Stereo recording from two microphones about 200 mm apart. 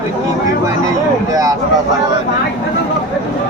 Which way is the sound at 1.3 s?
20° right (ahead or behind).